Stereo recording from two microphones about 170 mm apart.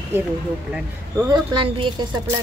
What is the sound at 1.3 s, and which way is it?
Speech, 30° right (ahead or behind).